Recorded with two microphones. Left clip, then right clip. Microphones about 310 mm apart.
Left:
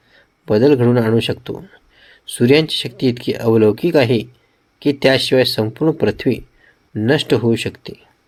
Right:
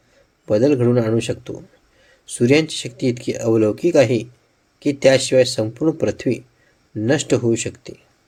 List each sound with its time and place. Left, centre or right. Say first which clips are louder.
0.4 s a man's voice: left 3 dB; left